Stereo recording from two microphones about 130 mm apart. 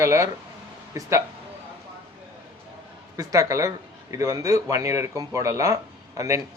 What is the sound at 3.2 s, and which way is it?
Speech, 25° right (ahead or behind).